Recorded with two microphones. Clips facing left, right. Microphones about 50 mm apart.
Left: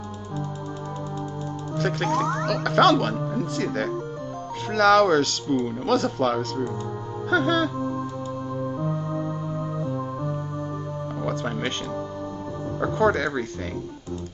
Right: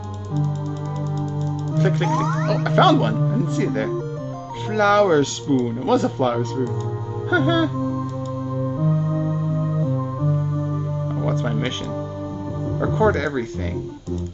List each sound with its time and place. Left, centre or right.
1.8 s speech: centre
8.8 s music: right
9.1 s music: right
11.4 s speech: centre
12.8 s speech: centre